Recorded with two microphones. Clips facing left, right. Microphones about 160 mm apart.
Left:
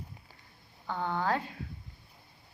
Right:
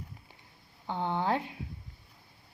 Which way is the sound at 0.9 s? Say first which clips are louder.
Right 1 dB; 20° right (ahead or behind).